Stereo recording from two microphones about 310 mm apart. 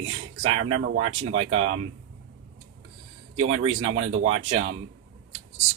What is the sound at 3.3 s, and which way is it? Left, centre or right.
Speech, right.